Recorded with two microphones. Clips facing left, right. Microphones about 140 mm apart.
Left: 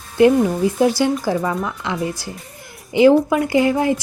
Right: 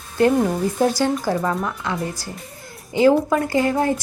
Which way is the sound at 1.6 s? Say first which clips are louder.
Left 2 dB; 15° left (ahead or behind).